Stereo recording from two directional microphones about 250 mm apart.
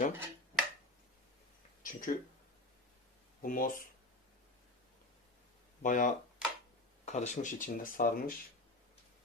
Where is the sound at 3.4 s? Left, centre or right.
Left.